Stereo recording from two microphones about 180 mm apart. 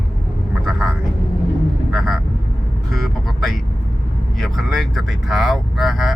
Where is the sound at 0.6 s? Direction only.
Centre (ahead or behind).